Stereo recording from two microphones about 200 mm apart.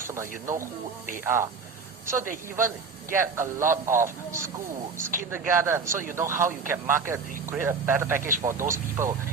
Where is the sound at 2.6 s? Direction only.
10° right (ahead or behind).